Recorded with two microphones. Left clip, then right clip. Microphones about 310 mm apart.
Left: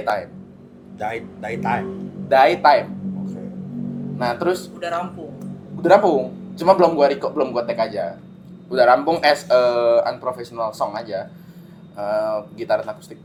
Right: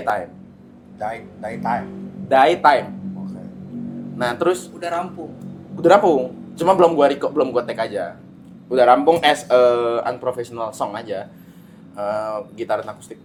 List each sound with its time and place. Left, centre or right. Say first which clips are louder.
0.9 s speech: left 1 dB; left
2.3 s speech: even; right
4.2 s speech: right 2 dB; right
4.8 s speech: right 1 dB; centre
5.8 s speech: right 1 dB; right